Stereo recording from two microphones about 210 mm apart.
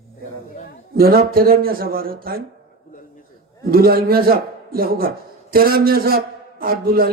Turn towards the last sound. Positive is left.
turn(degrees=-45)  # may be behind; listen again after turning